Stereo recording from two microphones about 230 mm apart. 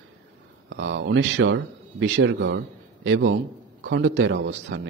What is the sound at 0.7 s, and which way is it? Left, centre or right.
A man's voice, right.